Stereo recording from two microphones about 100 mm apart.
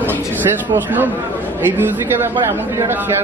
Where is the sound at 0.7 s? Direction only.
15° right (ahead or behind).